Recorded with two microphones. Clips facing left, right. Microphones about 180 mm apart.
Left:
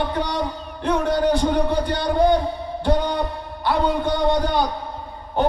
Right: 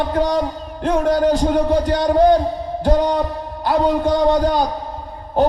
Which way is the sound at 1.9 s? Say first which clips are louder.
Right 5 dB; 40° right (ahead or behind).